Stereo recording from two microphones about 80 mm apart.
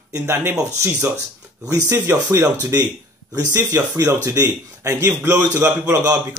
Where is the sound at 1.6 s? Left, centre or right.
Right.